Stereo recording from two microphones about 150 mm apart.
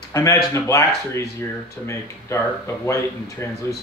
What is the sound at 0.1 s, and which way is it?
Speech, 20° left (ahead or behind).